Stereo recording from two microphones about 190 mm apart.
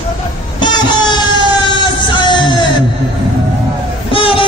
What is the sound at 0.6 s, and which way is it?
Music, 25° left (ahead or behind).